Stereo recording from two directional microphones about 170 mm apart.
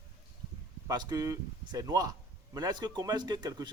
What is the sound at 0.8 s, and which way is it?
Speech, 20° right (ahead or behind).